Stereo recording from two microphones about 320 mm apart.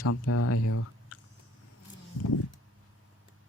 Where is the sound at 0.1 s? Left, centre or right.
Left.